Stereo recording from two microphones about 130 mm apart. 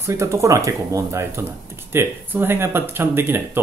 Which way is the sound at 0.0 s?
20° right (ahead or behind).